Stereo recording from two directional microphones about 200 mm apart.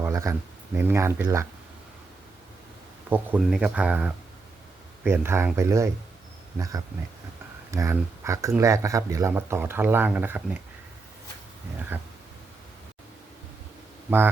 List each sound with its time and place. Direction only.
0.0 s a sound: 15° right (ahead or behind)
0.8 s speech: 10° right (ahead or behind)
3.1 s speech: 5° right (ahead or behind)
11.9 s speech: 10° right (ahead or behind)